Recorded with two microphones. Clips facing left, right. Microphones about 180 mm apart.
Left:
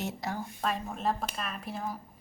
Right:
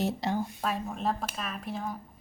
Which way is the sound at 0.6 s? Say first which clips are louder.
Right 1 dB; centre (ahead or behind).